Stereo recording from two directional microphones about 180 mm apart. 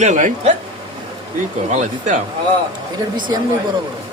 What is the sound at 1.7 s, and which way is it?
Speech, 40° right (ahead or behind).